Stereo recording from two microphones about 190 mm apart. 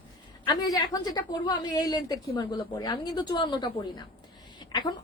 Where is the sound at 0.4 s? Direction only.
20° left (ahead or behind).